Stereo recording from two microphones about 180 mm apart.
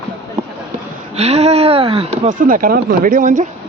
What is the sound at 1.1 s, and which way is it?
Speech, 35° right (ahead or behind).